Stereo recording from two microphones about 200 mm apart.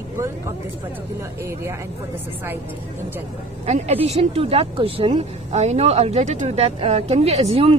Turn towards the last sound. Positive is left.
turn(degrees=-30)  # may be behind; listen again after turning